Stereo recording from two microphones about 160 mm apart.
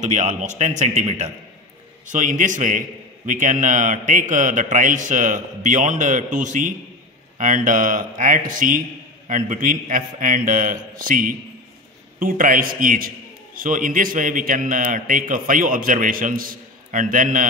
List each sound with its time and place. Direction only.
0.0 s a man's voice: 50° right (ahead or behind)